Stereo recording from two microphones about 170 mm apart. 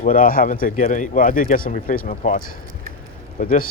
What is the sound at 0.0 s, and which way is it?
Speech, 55° left (ahead or behind).